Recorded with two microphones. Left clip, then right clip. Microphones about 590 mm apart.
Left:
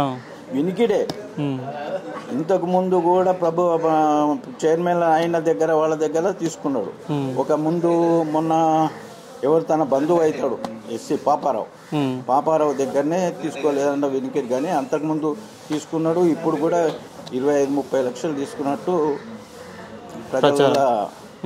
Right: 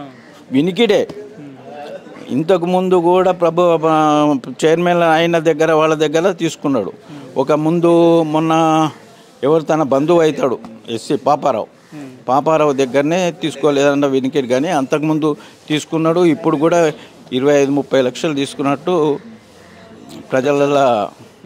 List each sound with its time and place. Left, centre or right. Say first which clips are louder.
0.6 s a man's voice: right 6 dB; right
2.4 s a man's voice: right 5 dB; right
20.3 s a man's voice: right 3 dB; right